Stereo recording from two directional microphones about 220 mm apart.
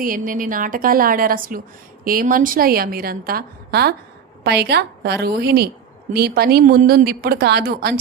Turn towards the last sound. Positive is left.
turn(degrees=-45)  # may be behind; listen again after turning